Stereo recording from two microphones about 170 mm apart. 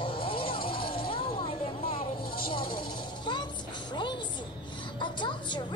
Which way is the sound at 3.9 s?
25° left (ahead or behind).